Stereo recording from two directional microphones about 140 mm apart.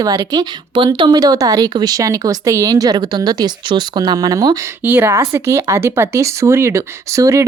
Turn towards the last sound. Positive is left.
turn(degrees=-20)  # may be behind; listen again after turning